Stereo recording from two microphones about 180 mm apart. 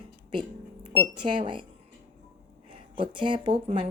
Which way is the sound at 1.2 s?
25° right (ahead or behind).